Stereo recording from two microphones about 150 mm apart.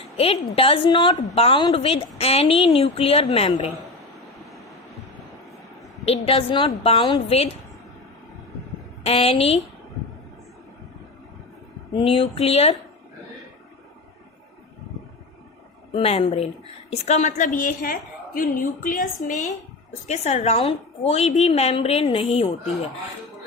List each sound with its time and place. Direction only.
0.2 s a woman's voice: 40° left (ahead or behind)
6.1 s a woman's voice: 40° left (ahead or behind)
7.3 s a woman's voice: 45° left (ahead or behind)
9.0 s a woman's voice: 40° left (ahead or behind)
11.9 s a woman's voice: 35° left (ahead or behind)
15.9 s a woman's voice: 40° left (ahead or behind)